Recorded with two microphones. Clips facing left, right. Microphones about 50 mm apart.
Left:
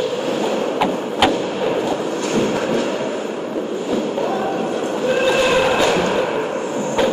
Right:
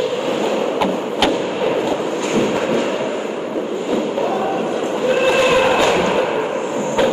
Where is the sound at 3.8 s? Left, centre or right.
Right.